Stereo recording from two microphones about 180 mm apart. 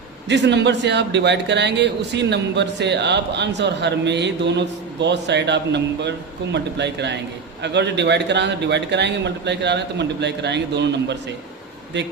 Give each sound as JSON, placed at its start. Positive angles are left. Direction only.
{"t": 0.3, "sound": "a man's voice", "side_deg": -75}